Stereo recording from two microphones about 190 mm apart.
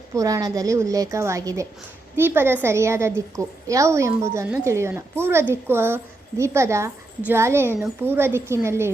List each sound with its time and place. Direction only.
0.1 s a woman's voice: 15° right (ahead or behind)